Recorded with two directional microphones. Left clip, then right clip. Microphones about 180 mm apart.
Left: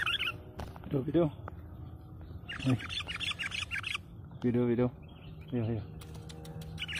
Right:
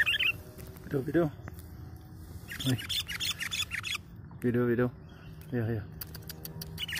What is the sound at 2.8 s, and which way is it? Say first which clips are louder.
Squawk: right 3 dB; 25° right (ahead or behind).